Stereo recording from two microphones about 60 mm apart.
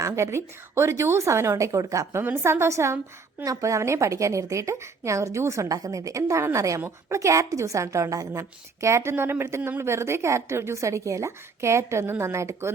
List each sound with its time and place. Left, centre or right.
0.0 s a woman's voice: right
2.2 s a woman's voice: right
2.5 s a woman's voice: right
3.4 s a woman's voice: right